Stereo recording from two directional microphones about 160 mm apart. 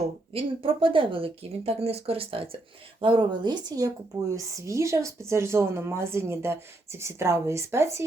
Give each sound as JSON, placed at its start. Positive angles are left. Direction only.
{"t": 0.3, "sound": "speech", "side_deg": -35}